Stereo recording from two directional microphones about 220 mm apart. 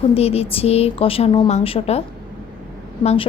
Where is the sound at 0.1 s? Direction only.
25° left (ahead or behind).